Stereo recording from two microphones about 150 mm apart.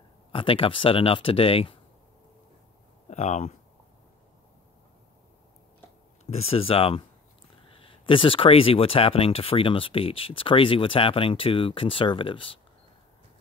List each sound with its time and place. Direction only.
0.3 s speech: 35° left (ahead or behind)
3.1 s speech: 50° left (ahead or behind)
6.3 s speech: 40° left (ahead or behind)